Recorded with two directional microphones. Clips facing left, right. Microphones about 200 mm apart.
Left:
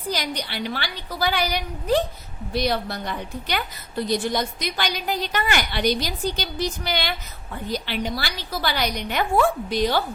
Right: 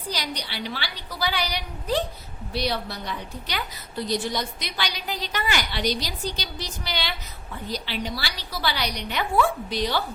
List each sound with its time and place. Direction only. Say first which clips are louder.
0.1 s a woman's voice: left 4 dB; 50° left (ahead or behind)